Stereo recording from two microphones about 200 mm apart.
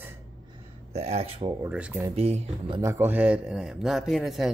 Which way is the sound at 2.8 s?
10° right (ahead or behind).